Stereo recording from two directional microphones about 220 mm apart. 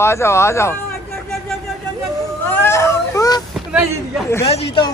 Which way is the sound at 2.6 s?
15° left (ahead or behind).